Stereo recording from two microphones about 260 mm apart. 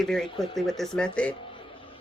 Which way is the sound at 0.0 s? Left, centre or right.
Centre.